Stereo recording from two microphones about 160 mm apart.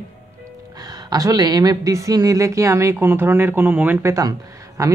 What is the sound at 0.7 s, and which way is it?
Speech, 25° right (ahead or behind).